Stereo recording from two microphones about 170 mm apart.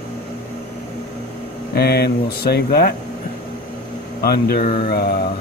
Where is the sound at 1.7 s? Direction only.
70° left (ahead or behind).